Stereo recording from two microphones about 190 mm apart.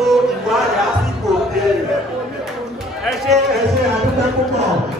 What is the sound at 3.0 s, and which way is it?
Speech, centre (ahead or behind).